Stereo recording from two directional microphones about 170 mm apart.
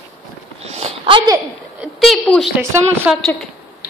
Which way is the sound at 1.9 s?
Centre (ahead or behind).